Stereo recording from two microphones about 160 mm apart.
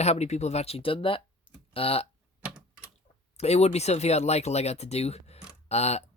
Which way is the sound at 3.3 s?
40° left (ahead or behind).